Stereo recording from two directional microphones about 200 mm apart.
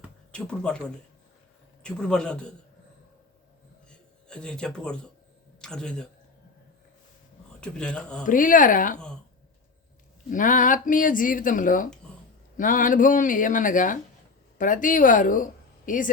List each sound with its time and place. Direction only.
0.3 s a man's voice: 5° left (ahead or behind)
3.8 s a sound: 5° left (ahead or behind)
5.5 s speech: 5° left (ahead or behind)
7.6 s a man's voice: 5° left (ahead or behind)
8.3 s speech: 40° left (ahead or behind)
10.2 s speech: 40° left (ahead or behind)